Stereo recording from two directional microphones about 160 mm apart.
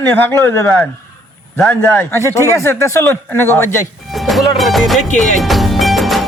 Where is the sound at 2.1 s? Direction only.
20° left (ahead or behind).